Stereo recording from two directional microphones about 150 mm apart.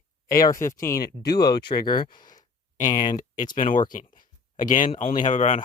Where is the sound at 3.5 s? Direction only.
60° left (ahead or behind).